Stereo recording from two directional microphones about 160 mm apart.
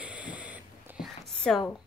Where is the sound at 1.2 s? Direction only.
Centre (ahead or behind).